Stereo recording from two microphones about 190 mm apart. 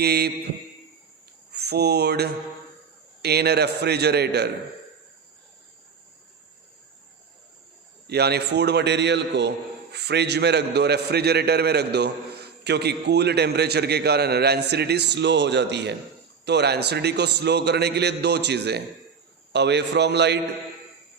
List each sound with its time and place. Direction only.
0.0 s a man's voice: 55° right (ahead or behind)
1.5 s mantra: 60° right (ahead or behind)
3.2 s a man's voice: 60° right (ahead or behind)
8.0 s a man's voice: 60° right (ahead or behind)